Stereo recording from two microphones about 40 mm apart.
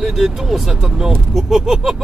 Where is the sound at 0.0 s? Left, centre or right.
Centre.